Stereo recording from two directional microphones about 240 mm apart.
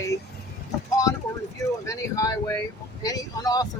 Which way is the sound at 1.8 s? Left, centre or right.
Centre.